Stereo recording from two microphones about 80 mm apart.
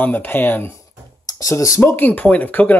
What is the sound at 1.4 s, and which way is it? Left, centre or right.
Speech, left.